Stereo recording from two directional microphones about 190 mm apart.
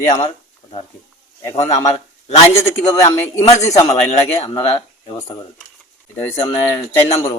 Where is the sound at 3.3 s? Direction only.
15° left (ahead or behind).